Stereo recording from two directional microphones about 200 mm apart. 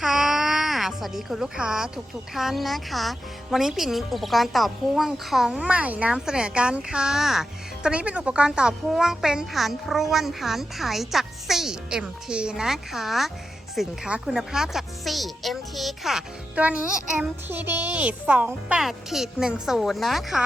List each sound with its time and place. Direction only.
0.0 s baby cry: centre (ahead or behind)
2.3 s speech: centre (ahead or behind)